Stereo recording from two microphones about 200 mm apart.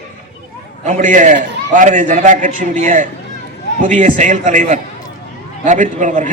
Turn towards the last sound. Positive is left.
turn(degrees=-40)  # may be behind; listen again after turning